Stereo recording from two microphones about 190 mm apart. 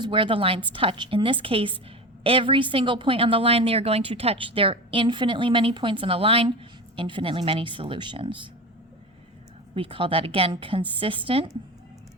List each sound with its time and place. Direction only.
0.0 s a woman's voice: 25° right (ahead or behind)
9.7 s a woman's voice: 30° right (ahead or behind)